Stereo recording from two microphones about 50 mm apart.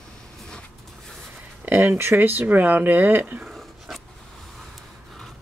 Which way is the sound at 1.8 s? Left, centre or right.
Right.